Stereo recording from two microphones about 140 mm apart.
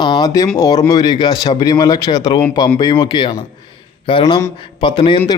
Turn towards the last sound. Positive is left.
turn(degrees=35)  # may be behind; listen again after turning